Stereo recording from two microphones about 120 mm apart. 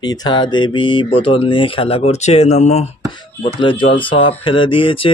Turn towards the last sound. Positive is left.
turn(degrees=45)  # may be behind; listen again after turning